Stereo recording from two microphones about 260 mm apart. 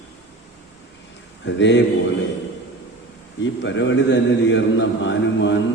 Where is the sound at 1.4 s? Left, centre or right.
Left.